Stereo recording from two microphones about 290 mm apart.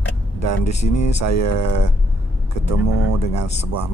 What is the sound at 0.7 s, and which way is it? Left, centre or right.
Speech, left.